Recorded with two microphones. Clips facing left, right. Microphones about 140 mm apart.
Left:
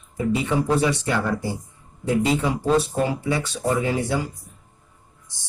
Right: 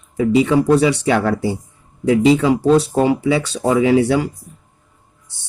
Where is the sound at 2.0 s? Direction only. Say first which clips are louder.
Right 8 dB; 85° right.